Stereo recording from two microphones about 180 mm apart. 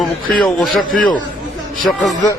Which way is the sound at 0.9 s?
50° left (ahead or behind).